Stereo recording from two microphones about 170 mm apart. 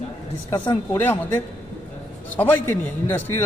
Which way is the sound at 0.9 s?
15° left (ahead or behind).